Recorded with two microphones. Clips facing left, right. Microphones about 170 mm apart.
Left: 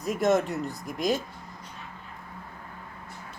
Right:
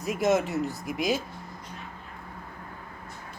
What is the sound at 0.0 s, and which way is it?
Speech, centre (ahead or behind).